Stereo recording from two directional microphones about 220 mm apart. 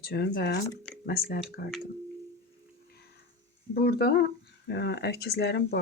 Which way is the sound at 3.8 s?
45° left (ahead or behind).